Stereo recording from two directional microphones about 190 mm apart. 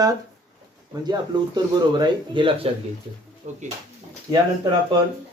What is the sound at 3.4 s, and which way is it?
Speech, 35° right (ahead or behind).